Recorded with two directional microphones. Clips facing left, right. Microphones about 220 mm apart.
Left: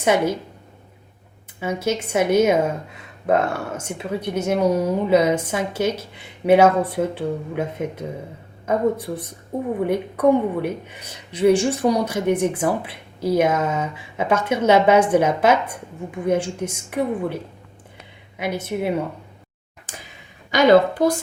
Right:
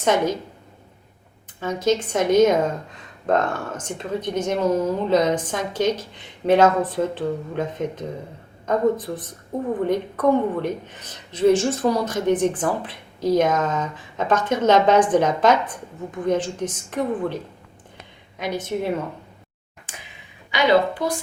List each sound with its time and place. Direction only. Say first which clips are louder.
0.0 s a woman's voice: left 1 dB; 10° left (ahead or behind)
1.6 s a woman's voice: right 2 dB; 10° left (ahead or behind)
18.3 s a woman's voice: left 1 dB; 10° left (ahead or behind)
20.5 s a woman's voice: left 4 dB; 45° left (ahead or behind)